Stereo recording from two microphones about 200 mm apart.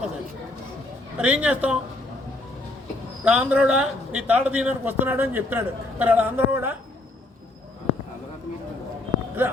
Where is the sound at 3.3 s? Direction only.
5° right (ahead or behind).